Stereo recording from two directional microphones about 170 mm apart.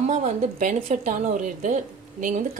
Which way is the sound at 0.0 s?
45° right (ahead or behind).